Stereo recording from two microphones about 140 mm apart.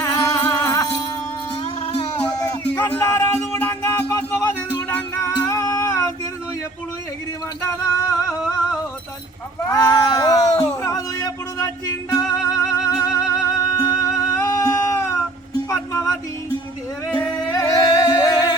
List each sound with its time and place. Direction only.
0.0 s music: 20° left (ahead or behind)
1.6 s music: 45° left (ahead or behind)
2.4 s music: 25° left (ahead or behind)
2.8 s music: 15° left (ahead or behind)
7.9 s music: 20° left (ahead or behind)
9.6 s a sound: 25° left (ahead or behind)
10.8 s music: 25° left (ahead or behind)
17.5 s music: 25° left (ahead or behind)